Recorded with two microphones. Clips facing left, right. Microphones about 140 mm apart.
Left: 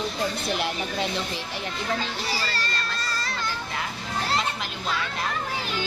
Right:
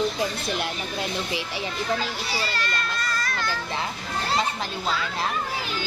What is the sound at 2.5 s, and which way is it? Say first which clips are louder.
Children playing: right 2 dB; 35° left (ahead or behind).